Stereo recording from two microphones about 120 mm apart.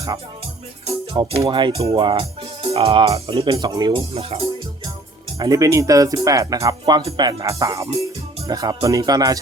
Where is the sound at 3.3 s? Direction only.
50° right (ahead or behind).